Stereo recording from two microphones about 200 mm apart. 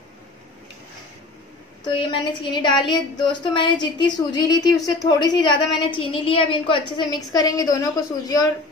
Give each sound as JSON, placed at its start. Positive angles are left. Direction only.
{"t": 1.9, "sound": "a woman's voice", "side_deg": 25}